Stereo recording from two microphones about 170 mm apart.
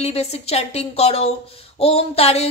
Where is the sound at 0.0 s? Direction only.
40° left (ahead or behind).